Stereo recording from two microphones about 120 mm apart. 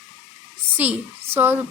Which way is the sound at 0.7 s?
15° right (ahead or behind).